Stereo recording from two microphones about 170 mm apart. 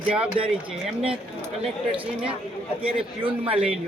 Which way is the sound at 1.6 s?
30° right (ahead or behind).